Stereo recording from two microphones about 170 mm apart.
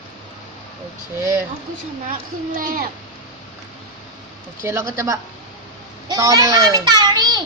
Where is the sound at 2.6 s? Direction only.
55° right (ahead or behind).